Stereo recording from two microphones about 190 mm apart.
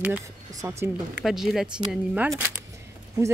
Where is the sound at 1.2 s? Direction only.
Centre (ahead or behind).